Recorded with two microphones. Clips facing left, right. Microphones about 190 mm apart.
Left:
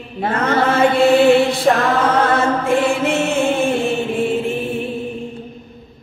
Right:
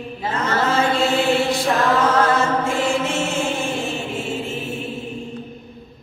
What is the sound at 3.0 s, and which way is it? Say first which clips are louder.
Mantra: left 6 dB; 60° left (ahead or behind).